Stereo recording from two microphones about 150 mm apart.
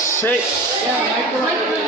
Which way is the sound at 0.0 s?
15° left (ahead or behind).